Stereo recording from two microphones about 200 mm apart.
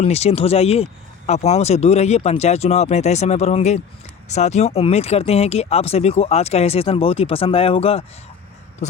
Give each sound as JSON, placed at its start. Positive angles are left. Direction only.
{"t": 0.0, "sound": "speech", "side_deg": 30}